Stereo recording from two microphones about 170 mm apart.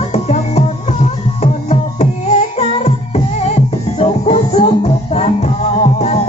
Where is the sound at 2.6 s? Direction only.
40° left (ahead or behind).